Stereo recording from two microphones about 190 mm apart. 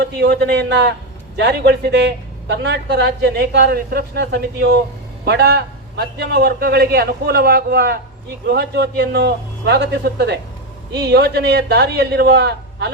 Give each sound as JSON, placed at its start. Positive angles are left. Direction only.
{"t": 0.0, "sound": "a woman's voice", "side_deg": -55}